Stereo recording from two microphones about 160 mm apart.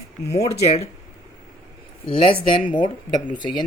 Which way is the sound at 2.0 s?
35° left (ahead or behind).